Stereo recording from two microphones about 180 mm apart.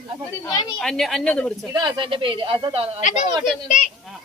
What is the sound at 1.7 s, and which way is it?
Speech, 25° right (ahead or behind).